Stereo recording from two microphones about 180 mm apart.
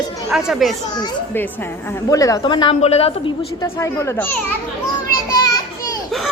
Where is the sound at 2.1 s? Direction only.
20° left (ahead or behind); by 3.3 s 35° left (ahead or behind).